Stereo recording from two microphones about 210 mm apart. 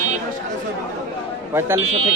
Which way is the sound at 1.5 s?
10° right (ahead or behind).